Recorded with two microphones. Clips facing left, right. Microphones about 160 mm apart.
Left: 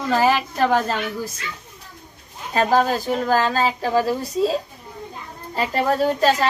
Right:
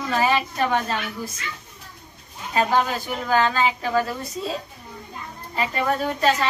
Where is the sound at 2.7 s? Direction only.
40° left (ahead or behind).